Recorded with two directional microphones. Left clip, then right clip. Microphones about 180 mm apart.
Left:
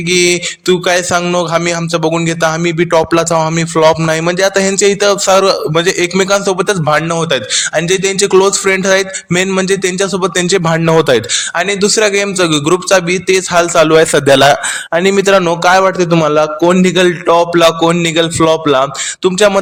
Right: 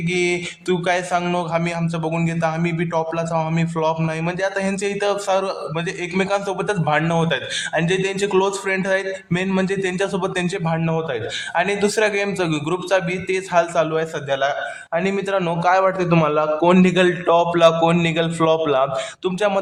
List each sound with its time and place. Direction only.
0.1 s a man's voice: 30° left (ahead or behind); by 11.2 s 45° left (ahead or behind)
11.5 s a man's voice: 20° left (ahead or behind); by 14.5 s 60° left (ahead or behind)
14.9 s a man's voice: 40° left (ahead or behind)
16.8 s speech: 25° left (ahead or behind)